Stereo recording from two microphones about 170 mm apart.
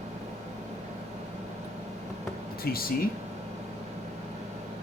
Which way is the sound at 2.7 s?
65° left (ahead or behind).